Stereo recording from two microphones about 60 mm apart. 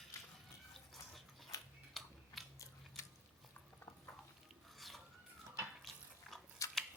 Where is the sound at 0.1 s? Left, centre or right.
Left.